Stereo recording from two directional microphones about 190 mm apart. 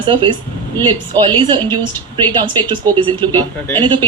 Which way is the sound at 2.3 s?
25° right (ahead or behind).